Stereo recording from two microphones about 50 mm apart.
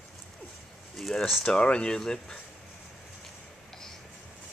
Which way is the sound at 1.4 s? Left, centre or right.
Centre.